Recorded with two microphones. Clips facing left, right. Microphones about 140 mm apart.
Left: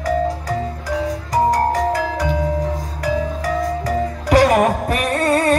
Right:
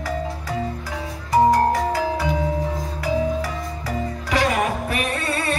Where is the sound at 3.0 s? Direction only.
45° left (ahead or behind).